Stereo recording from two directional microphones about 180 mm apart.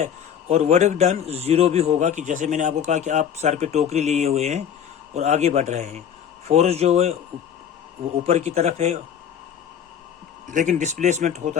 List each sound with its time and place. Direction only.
0.0 s a man's voice: 40° right (ahead or behind)
10.5 s speech: 45° right (ahead or behind)